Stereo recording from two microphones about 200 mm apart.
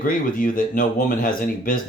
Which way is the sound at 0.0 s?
45° left (ahead or behind).